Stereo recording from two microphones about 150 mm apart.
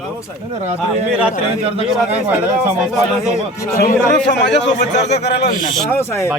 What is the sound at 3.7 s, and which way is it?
Speech, 90° left.